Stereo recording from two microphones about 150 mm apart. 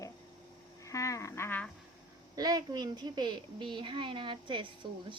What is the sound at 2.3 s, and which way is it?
A woman's voice, 25° right (ahead or behind).